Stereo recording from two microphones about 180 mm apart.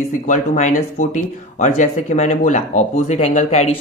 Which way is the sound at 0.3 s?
40° left (ahead or behind).